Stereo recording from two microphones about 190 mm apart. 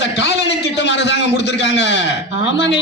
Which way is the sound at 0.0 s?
65° left (ahead or behind).